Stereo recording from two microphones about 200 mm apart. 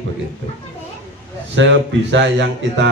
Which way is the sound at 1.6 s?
65° right (ahead or behind).